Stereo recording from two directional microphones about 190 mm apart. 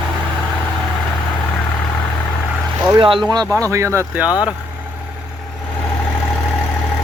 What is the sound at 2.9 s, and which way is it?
Speech, 25° right (ahead or behind).